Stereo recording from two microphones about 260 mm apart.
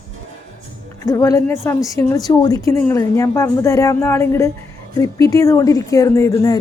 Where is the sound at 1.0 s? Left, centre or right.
Centre.